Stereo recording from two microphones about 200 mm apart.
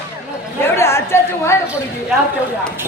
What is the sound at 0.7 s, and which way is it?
Chatter, 15° left (ahead or behind).